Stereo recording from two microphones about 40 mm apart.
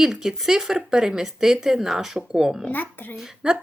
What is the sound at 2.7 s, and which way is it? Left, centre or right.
Speech, left.